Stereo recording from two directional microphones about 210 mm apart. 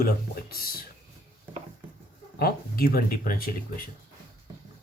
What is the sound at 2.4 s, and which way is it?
Speech, 45° left (ahead or behind).